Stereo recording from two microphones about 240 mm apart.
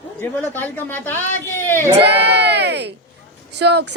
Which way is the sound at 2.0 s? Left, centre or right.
Right.